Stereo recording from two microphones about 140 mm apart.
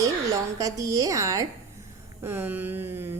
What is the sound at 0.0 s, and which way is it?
A woman's voice, 25° right (ahead or behind).